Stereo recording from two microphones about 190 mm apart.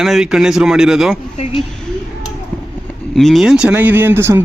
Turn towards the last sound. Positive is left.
turn(degrees=-10)  # may be behind; listen again after turning